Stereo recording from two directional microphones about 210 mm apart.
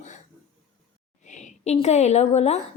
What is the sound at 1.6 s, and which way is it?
Speech, 30° left (ahead or behind).